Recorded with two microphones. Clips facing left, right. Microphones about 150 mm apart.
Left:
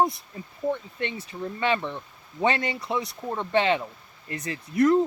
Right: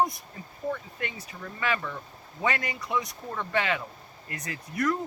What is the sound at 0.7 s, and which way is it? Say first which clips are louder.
Speech: left 4 dB; 30° left (ahead or behind).